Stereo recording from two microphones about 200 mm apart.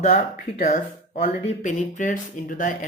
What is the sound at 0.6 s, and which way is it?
Speech, 40° left (ahead or behind).